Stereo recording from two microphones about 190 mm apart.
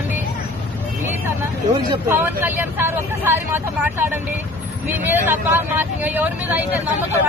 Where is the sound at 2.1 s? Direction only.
10° right (ahead or behind).